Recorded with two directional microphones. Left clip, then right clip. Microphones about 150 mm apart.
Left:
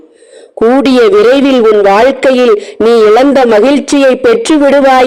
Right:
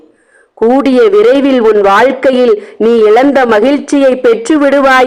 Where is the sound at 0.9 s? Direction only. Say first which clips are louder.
Even; 35° left (ahead or behind).